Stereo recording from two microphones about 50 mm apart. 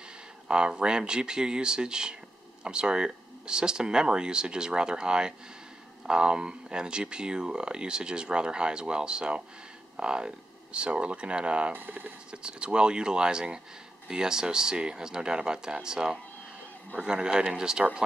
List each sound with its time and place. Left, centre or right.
0.5 s speech: centre
11.7 s speech: right
12.3 s speech: centre